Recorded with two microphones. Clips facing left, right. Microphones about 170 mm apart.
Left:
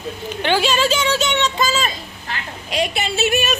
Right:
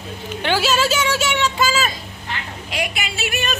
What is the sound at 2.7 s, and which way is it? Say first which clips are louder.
Speech: left 5 dB; 25° left (ahead or behind).